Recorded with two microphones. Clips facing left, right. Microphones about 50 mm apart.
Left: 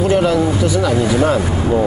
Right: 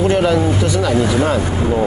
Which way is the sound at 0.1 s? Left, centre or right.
Centre.